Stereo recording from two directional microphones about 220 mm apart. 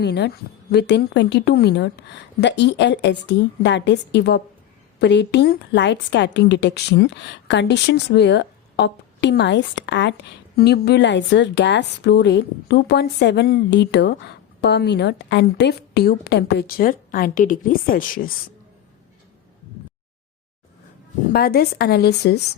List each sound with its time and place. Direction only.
0.0 s speech: 50° left (ahead or behind)
21.3 s speech: 45° left (ahead or behind)